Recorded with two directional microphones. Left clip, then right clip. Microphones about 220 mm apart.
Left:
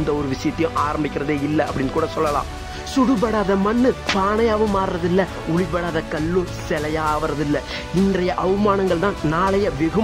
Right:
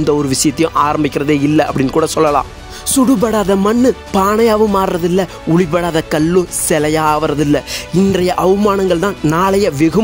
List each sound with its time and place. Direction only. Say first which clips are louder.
0.0 s speech: right 8 dB; 45° right (ahead or behind)
2.9 s speech: right 6 dB; 35° right (ahead or behind)